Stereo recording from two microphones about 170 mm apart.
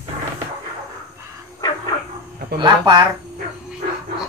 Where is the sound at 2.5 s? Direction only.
25° right (ahead or behind).